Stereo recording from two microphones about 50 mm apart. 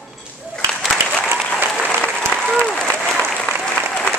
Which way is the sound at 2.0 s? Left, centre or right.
Centre.